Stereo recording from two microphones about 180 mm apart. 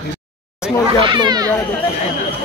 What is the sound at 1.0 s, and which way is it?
Speech, 25° right (ahead or behind).